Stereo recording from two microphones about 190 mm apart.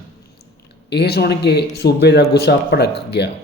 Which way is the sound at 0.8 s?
60° left (ahead or behind).